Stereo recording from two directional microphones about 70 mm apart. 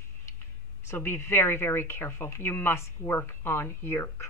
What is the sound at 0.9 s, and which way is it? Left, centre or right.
Speech, left.